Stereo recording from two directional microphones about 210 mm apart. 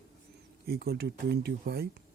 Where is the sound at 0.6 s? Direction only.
50° right (ahead or behind).